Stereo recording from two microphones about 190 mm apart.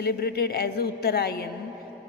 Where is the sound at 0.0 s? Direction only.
55° left (ahead or behind).